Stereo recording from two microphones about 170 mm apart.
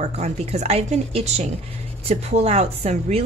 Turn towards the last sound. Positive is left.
turn(degrees=-35)  # may be behind; listen again after turning